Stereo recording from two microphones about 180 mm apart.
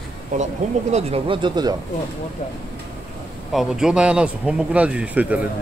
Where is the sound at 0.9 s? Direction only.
30° right (ahead or behind).